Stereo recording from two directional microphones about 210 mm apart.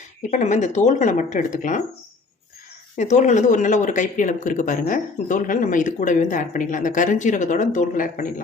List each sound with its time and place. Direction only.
0.3 s speech: 35° left (ahead or behind)
3.0 s speech: 35° left (ahead or behind)